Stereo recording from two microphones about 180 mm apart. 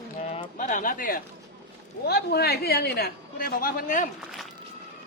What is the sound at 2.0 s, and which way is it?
A woman's voice, 60° left (ahead or behind).